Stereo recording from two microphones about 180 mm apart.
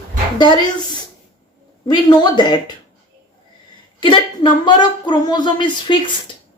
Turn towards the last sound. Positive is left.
turn(degrees=25)  # may be behind; listen again after turning